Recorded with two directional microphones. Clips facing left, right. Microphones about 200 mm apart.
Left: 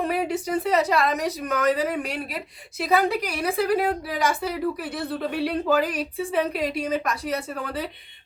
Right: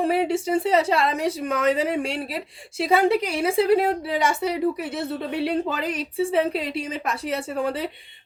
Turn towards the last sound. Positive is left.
turn(degrees=-25)  # may be behind; listen again after turning